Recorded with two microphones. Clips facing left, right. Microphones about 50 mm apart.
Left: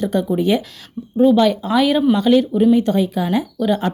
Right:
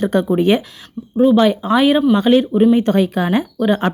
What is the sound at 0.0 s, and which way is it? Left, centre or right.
Speech, right.